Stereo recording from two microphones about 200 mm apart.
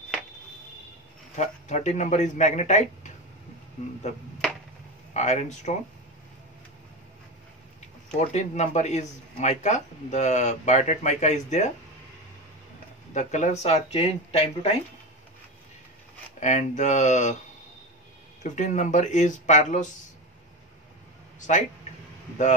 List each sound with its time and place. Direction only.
1.3 s speech: 35° left (ahead or behind)
5.1 s speech: 35° left (ahead or behind)
8.1 s speech: 35° left (ahead or behind)
13.1 s speech: 35° left (ahead or behind)
16.3 s speech: 35° left (ahead or behind)
18.4 s speech: 35° left (ahead or behind)
21.4 s speech: 40° left (ahead or behind)